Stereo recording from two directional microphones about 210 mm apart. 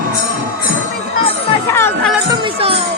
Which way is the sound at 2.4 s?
25° right (ahead or behind).